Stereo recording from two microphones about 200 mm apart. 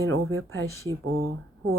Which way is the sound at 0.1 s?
90° right.